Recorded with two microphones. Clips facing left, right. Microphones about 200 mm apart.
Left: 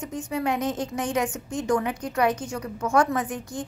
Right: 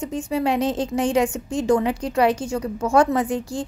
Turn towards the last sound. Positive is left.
turn(degrees=-30)  # may be behind; listen again after turning